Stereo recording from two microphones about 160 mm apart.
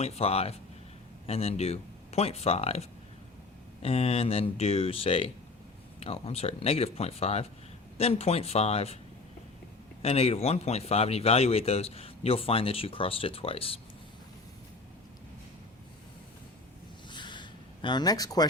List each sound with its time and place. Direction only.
0.0 s speech: 40° left (ahead or behind)
3.8 s speech: 40° left (ahead or behind)
10.0 s speech: 40° left (ahead or behind)
17.1 s a sound: 30° left (ahead or behind)